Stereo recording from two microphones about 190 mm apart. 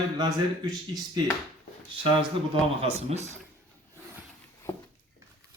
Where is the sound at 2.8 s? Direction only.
35° right (ahead or behind).